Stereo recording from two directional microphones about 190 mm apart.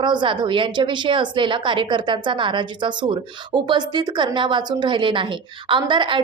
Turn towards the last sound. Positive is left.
turn(degrees=-25)  # may be behind; listen again after turning